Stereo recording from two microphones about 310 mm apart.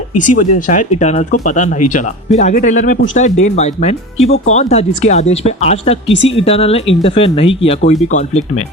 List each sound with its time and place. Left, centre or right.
0.1 s speech: left
0.3 s speech: left